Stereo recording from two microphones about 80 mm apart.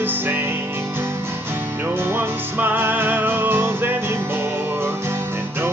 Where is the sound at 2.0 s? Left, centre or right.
Right.